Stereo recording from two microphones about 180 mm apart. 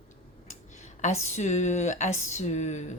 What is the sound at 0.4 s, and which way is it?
Speech, 40° left (ahead or behind).